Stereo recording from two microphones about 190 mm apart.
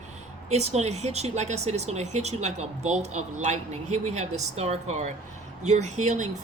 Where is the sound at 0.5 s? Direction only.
35° right (ahead or behind).